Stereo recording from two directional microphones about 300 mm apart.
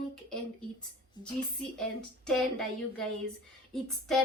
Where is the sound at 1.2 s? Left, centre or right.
Centre.